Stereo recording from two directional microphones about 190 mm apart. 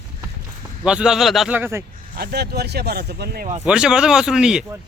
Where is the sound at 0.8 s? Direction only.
5° right (ahead or behind).